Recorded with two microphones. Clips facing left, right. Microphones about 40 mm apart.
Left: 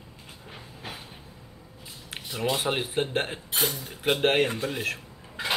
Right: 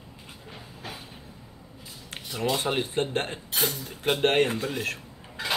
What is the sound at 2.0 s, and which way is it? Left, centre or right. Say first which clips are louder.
Speech: even; centre.